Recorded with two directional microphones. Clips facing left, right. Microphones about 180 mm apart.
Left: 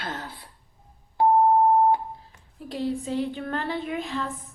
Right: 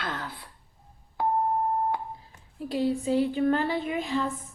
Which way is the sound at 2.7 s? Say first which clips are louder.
Right 3 dB; 5° right (ahead or behind).